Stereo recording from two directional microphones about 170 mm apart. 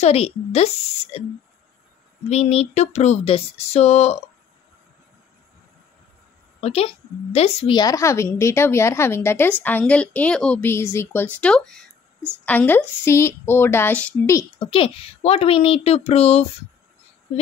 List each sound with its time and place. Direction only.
0.0 s speech: 35° left (ahead or behind)
2.2 s speech: 40° left (ahead or behind)
6.6 s a woman's voice: 35° left (ahead or behind); by 14.4 s 10° left (ahead or behind)
14.6 s speech: 30° left (ahead or behind)